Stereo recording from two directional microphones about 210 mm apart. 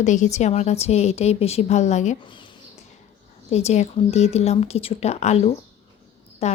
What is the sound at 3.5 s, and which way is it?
A woman's voice, 30° left (ahead or behind).